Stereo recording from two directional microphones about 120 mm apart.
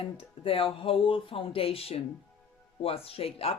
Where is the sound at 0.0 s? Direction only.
50° left (ahead or behind).